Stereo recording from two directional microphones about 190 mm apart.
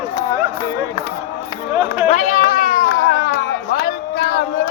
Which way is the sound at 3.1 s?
50° left (ahead or behind).